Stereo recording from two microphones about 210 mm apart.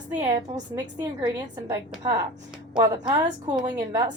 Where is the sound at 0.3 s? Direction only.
20° right (ahead or behind).